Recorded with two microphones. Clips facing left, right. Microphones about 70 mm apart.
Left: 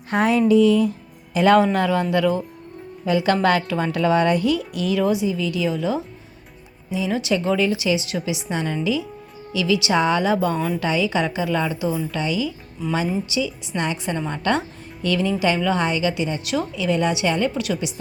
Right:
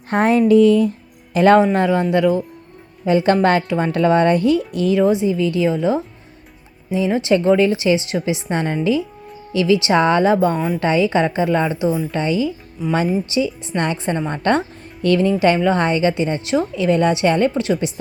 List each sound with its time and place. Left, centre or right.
0.1 s a woman's voice: right
1.5 s a man's voice: right
3.1 s a woman's voice: right
7.1 s a woman's voice: right
8.4 s a woman's voice: right
12.2 s a woman's voice: right
14.0 s a woman's voice: right
16.7 s a woman's voice: right
17.5 s a woman's voice: right